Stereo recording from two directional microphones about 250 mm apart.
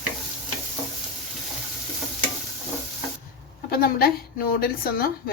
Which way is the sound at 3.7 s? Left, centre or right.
Left.